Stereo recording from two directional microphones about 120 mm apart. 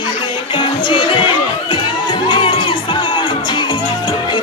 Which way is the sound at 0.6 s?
45° left (ahead or behind).